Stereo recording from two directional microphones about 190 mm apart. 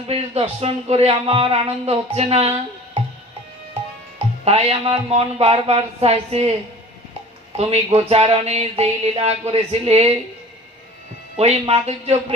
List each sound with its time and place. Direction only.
0.0 s a man's voice: 30° right (ahead or behind)
4.5 s a man's voice: 30° right (ahead or behind)
7.5 s a man's voice: 35° right (ahead or behind)
11.3 s a man's voice: 35° right (ahead or behind)